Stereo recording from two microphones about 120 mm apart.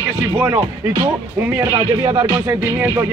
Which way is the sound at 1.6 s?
30° right (ahead or behind).